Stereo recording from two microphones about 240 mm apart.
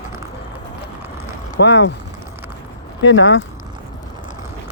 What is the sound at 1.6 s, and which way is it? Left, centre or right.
Speech, left.